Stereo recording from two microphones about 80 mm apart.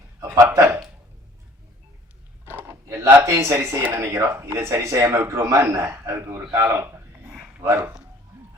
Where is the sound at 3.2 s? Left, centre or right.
Right.